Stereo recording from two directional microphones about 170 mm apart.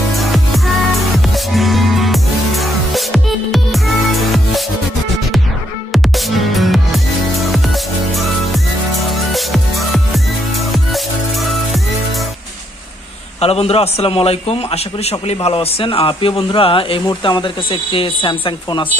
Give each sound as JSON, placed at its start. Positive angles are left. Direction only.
{"t": 0.2, "sound": "music", "side_deg": 0}
{"t": 5.9, "sound": "music", "side_deg": 0}
{"t": 9.1, "sound": "music", "side_deg": 0}
{"t": 13.4, "sound": "a man's voice", "side_deg": 35}